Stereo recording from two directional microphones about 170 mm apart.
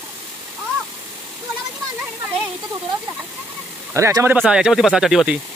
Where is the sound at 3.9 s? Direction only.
15° right (ahead or behind).